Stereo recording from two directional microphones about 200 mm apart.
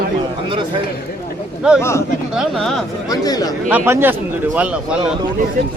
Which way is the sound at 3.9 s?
10° right (ahead or behind).